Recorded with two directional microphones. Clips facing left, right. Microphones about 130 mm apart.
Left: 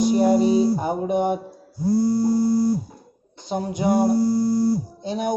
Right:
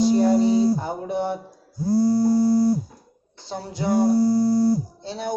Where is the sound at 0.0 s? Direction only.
15° left (ahead or behind).